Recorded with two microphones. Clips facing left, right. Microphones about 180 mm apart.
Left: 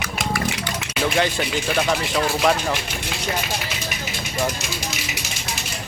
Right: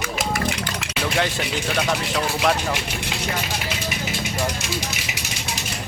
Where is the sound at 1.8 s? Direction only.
Centre (ahead or behind).